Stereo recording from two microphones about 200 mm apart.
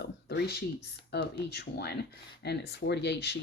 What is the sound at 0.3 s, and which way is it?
Speech, 55° left (ahead or behind).